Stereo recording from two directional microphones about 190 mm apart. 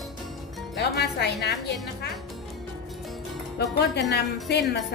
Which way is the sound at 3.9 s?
60° left (ahead or behind).